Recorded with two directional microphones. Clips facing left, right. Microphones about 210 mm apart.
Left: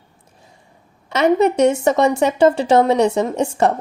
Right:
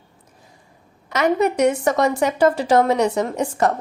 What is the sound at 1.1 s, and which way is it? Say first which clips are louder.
A woman's voice: left 4 dB; 25° left (ahead or behind).